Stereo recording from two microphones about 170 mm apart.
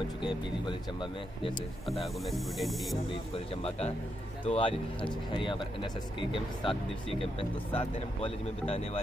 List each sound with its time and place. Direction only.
0.2 s speech: 30° left (ahead or behind)
1.9 s speech: centre (ahead or behind)
4.5 s speech: 30° left (ahead or behind)